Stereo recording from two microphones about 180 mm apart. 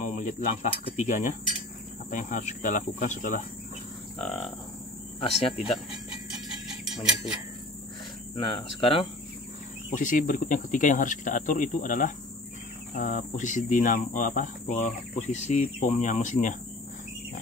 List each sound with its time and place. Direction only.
0.0 s speech: 40° left (ahead or behind)
4.2 s speech: centre (ahead or behind)
6.7 s a sound: 5° right (ahead or behind)
8.4 s speech: 25° left (ahead or behind)
9.9 s speech: 45° left (ahead or behind)